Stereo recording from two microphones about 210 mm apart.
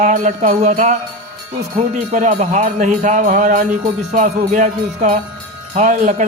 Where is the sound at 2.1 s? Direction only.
35° right (ahead or behind).